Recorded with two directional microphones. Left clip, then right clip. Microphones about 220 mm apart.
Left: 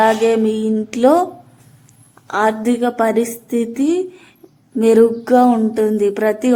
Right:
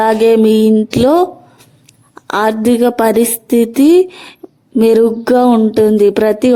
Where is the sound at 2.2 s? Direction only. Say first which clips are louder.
Right 4 dB; 45° right (ahead or behind).